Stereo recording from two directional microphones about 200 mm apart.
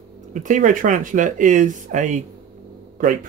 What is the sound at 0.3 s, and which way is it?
Speech, 40° right (ahead or behind).